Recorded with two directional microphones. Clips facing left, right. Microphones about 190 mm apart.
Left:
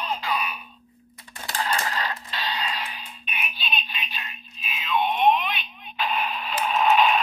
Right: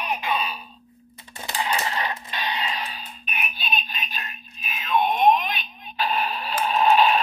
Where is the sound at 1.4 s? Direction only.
15° right (ahead or behind).